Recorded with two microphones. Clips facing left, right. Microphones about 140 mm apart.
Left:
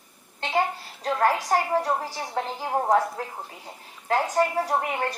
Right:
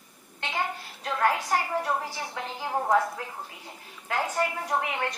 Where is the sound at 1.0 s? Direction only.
35° left (ahead or behind).